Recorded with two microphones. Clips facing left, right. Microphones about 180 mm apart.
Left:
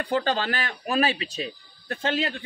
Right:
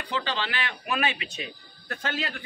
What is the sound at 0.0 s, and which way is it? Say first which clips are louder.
Speech: left 6 dB; 45° left (ahead or behind).